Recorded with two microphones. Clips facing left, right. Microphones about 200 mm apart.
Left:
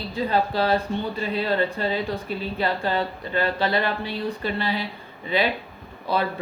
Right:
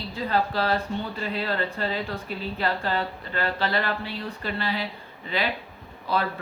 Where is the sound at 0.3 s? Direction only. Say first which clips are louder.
Left 2 dB; 20° left (ahead or behind).